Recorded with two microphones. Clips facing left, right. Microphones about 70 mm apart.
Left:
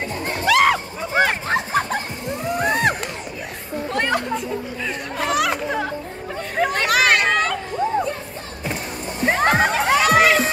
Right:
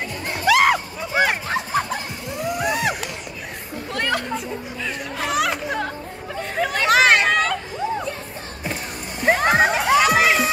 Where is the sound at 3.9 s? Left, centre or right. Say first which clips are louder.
Left 2 dB; left.